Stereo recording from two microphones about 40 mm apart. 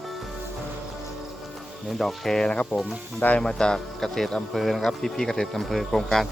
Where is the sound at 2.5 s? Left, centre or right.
Left.